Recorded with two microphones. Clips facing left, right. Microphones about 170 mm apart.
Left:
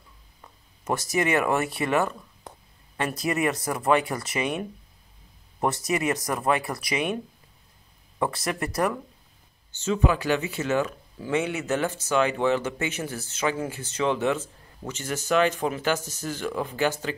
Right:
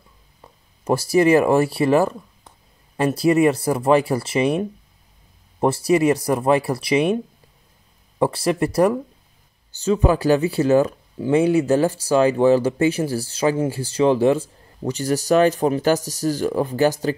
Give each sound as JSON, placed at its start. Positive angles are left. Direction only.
{"t": 0.4, "sound": "speech", "side_deg": -30}
{"t": 8.2, "sound": "speech", "side_deg": -30}